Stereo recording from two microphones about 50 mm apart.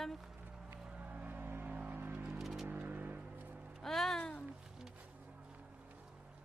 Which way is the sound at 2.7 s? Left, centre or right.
Right.